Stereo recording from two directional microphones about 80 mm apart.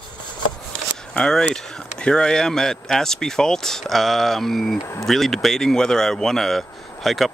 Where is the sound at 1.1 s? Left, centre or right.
Centre.